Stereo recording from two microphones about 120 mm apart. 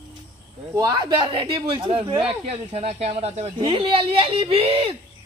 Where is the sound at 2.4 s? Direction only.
65° right (ahead or behind); by 4.9 s 50° right (ahead or behind).